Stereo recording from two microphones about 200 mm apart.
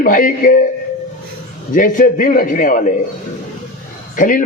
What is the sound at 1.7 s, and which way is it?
A man's voice, 40° left (ahead or behind).